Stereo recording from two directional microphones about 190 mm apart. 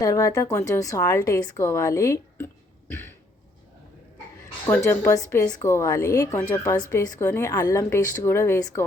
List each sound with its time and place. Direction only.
0.0 s a woman's voice: 20° left (ahead or behind)
4.6 s a woman's voice: 15° left (ahead or behind)